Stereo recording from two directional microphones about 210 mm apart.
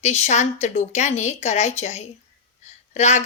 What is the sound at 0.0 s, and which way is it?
A woman's voice, 30° left (ahead or behind).